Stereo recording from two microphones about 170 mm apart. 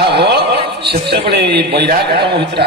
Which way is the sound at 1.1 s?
75° right (ahead or behind).